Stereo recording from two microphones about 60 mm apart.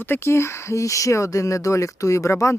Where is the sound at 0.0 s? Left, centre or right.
Left.